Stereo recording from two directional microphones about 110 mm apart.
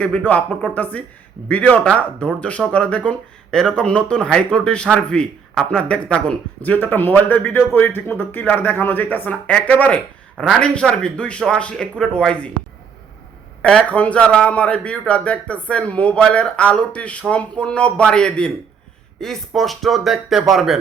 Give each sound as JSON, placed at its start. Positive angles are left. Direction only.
{"t": 0.3, "sound": "speech", "side_deg": 15}
{"t": 10.3, "sound": "speech", "side_deg": 0}
{"t": 13.6, "sound": "speech", "side_deg": 10}